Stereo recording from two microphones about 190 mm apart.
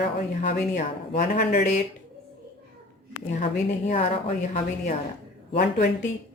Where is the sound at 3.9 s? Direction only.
35° left (ahead or behind).